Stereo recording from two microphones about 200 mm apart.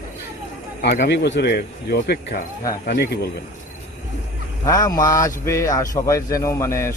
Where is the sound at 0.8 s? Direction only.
55° left (ahead or behind).